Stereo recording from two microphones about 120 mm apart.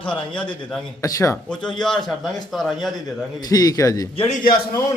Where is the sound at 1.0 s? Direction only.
25° left (ahead or behind).